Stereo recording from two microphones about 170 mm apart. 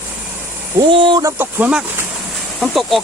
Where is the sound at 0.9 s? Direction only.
30° right (ahead or behind).